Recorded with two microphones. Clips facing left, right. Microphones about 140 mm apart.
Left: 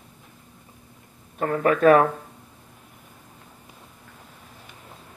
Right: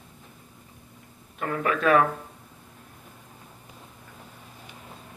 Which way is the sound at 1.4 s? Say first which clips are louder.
Left 7 dB; 40° left (ahead or behind).